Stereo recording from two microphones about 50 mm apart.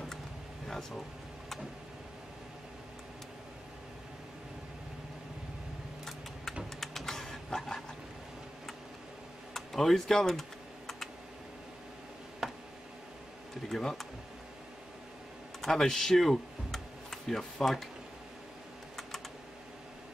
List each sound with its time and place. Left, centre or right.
0.7 s speech: centre
6.8 s a sound: centre
9.5 s speech: centre
12.4 s tick: centre
13.7 s speech: centre
15.6 s speech: centre